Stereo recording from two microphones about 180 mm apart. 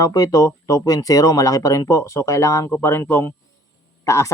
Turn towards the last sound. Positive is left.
turn(degrees=15)  # may be behind; listen again after turning